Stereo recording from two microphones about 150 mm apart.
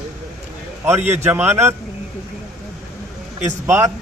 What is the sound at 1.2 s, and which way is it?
Speech, 15° right (ahead or behind).